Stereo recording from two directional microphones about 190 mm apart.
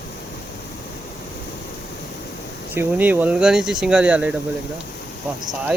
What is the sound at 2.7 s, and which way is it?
Speech, 10° right (ahead or behind).